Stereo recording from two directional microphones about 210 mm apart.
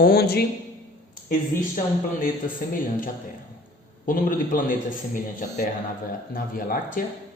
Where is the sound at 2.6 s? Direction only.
40° left (ahead or behind).